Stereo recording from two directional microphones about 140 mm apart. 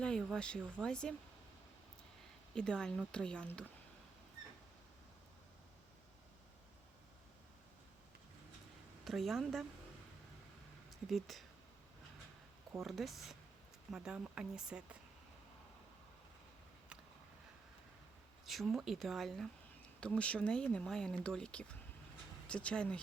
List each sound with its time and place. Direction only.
0.0 s speech: 5° left (ahead or behind)
2.6 s speech: 5° left (ahead or behind)
9.0 s speech: centre (ahead or behind)
11.0 s speech: centre (ahead or behind)
12.8 s speech: centre (ahead or behind)
18.4 s speech: centre (ahead or behind)